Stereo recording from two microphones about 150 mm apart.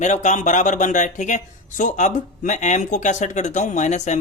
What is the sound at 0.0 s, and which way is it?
Speech, 55° left (ahead or behind).